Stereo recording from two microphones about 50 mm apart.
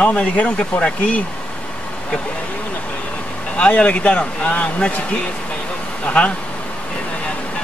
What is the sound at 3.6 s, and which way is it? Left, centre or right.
A man's voice, left.